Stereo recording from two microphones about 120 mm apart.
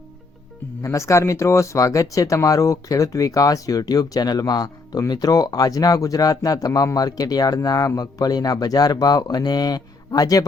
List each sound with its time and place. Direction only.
0.8 s speech: 25° left (ahead or behind)